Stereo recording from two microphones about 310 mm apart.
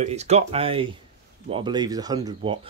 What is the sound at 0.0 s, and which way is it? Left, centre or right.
Speech, right.